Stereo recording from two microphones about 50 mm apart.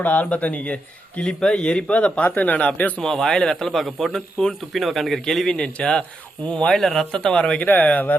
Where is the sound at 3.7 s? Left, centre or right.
Centre.